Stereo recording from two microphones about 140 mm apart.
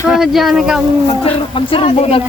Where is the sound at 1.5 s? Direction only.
40° left (ahead or behind).